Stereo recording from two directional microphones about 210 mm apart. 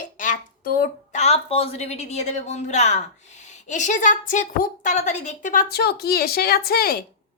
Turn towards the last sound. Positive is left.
turn(degrees=45)  # may be behind; listen again after turning